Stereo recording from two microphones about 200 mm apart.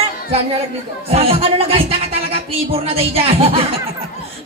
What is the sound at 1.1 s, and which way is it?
Speech, 30° right (ahead or behind).